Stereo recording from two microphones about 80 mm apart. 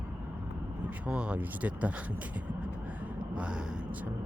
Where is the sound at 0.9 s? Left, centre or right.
Centre.